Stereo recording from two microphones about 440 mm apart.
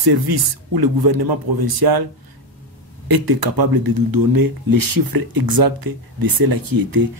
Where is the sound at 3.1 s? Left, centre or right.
Right.